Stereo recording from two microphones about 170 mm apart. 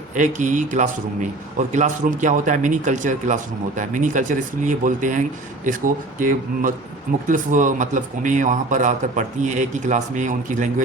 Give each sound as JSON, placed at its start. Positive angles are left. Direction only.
{"t": 0.1, "sound": "a man's voice", "side_deg": -45}